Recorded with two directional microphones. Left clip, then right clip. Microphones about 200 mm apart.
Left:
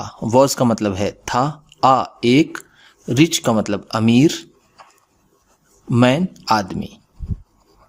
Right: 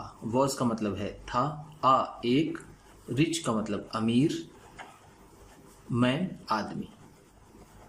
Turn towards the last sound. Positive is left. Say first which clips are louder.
# left 13 dB
turn(degrees=55)  # may be behind; listen again after turning